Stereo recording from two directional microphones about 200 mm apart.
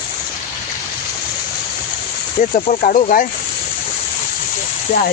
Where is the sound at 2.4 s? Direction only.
40° left (ahead or behind).